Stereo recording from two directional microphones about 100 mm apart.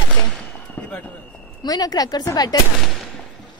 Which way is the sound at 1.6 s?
40° left (ahead or behind).